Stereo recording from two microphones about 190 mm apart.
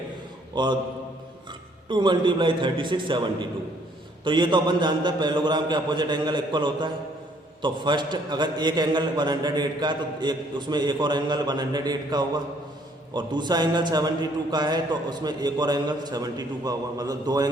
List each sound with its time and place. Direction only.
0.5 s a man's voice: 25° right (ahead or behind)
1.9 s a man's voice: 25° right (ahead or behind)
4.2 s a man's voice: 25° right (ahead or behind)